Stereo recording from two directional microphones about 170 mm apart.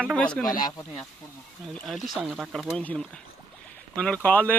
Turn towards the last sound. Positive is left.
turn(degrees=10)  # may be behind; listen again after turning